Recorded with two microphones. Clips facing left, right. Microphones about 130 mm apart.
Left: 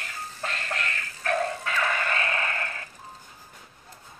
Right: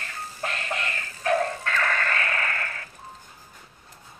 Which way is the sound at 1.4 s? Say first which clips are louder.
Right 1 dB; 10° left (ahead or behind).